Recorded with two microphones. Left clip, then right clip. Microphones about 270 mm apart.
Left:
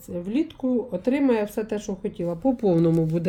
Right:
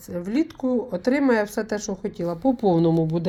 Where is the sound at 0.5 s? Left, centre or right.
Right.